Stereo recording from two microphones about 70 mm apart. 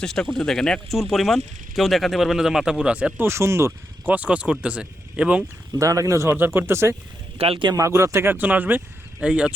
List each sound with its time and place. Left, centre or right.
0.0 s speech: centre
3.2 s speech: right
4.0 s speech: right
5.7 s speech: right
6.2 s speech: right; by 9.5 s centre